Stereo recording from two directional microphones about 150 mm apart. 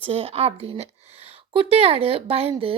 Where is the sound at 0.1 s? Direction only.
40° right (ahead or behind).